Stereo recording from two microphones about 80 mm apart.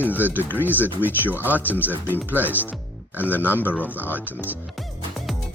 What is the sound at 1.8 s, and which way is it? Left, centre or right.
Speech, left.